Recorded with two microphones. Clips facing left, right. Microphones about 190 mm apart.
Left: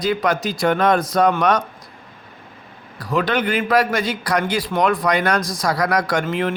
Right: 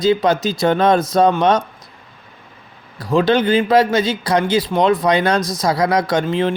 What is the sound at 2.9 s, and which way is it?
Speech, 25° right (ahead or behind).